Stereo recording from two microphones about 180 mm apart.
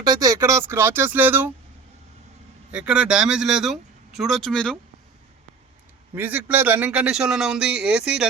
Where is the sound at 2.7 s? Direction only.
5° right (ahead or behind).